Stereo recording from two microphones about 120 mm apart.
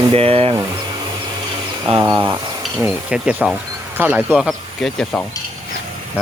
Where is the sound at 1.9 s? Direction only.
55° right (ahead or behind).